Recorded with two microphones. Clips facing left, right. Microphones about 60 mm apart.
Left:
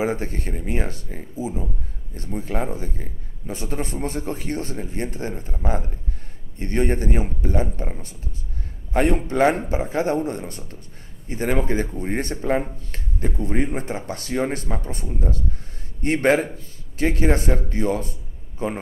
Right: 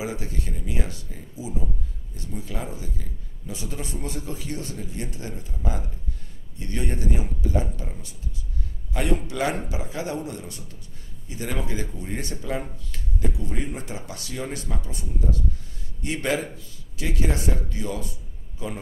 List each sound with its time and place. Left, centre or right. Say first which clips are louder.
0.0 s a man's voice: left 7 dB; left